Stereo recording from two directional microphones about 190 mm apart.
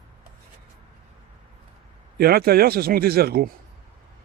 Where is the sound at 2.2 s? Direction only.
55° right (ahead or behind).